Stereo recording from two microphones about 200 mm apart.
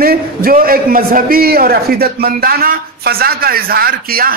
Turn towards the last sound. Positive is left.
turn(degrees=-45)  # may be behind; listen again after turning